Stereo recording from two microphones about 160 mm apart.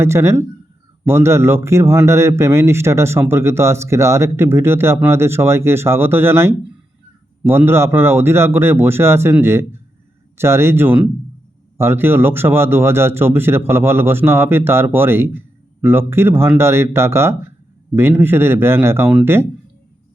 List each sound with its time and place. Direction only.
0.0 s a man's voice: 15° right (ahead or behind)